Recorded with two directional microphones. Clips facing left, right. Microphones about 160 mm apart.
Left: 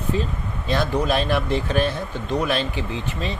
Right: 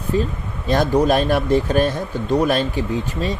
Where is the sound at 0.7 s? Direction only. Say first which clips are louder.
Right 5 dB; 45° right (ahead or behind).